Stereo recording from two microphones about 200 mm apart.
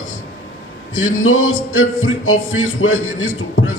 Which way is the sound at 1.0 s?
90° left.